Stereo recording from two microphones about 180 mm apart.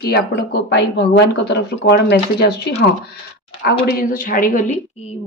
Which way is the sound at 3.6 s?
55° left (ahead or behind).